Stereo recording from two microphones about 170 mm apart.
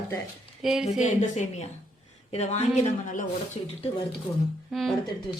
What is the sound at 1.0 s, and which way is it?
Speech, 45° left (ahead or behind).